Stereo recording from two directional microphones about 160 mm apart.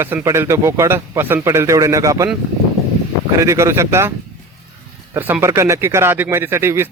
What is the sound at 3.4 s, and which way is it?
Speech, 20° right (ahead or behind).